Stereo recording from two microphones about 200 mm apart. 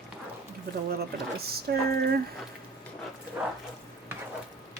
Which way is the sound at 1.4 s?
55° right (ahead or behind).